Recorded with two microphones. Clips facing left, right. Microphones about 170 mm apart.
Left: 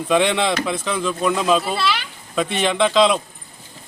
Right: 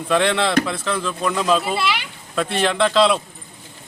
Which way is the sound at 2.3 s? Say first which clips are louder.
Even; 5° left (ahead or behind).